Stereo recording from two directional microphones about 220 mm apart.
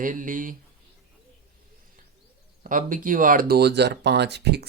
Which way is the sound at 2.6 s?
35° right (ahead or behind).